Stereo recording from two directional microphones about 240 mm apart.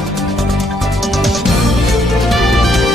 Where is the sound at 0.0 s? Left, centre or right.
Centre.